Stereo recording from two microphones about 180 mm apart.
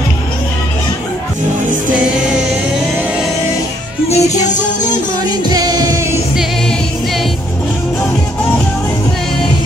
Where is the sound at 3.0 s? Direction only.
5° right (ahead or behind).